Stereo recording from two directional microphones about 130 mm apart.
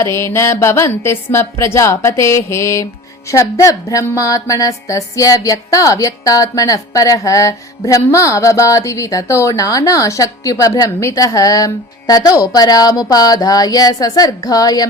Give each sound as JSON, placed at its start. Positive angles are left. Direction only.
{"t": 0.0, "sound": "speech", "side_deg": 20}